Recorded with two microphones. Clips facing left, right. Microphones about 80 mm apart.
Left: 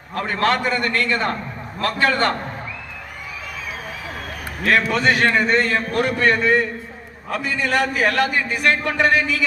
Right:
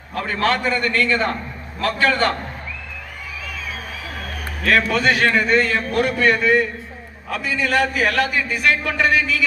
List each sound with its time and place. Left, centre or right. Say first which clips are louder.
0.1 s a man's voice: left 1 dB; left
4.6 s a man's voice: even; left